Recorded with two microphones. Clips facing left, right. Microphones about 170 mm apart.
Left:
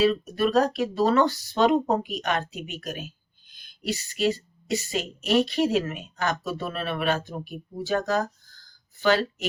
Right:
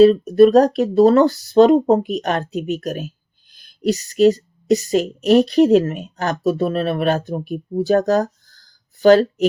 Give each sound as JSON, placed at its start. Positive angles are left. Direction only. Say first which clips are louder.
{"t": 0.0, "sound": "a woman's voice", "louder": "right 12 dB", "side_deg": -40}